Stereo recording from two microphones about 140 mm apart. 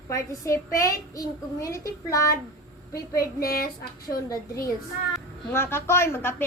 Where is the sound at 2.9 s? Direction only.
90° left.